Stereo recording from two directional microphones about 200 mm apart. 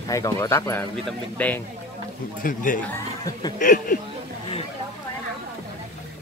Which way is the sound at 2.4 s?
40° left (ahead or behind).